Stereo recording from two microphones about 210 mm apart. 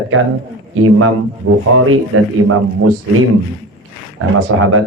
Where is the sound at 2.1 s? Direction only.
85° right.